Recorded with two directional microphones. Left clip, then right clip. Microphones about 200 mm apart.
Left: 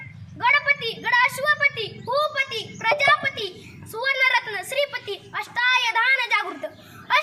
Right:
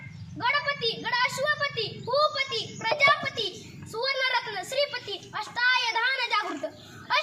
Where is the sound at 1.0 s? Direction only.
5° left (ahead or behind).